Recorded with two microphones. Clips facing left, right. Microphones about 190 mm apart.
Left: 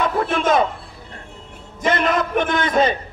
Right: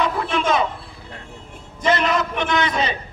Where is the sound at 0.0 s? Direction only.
50° left (ahead or behind).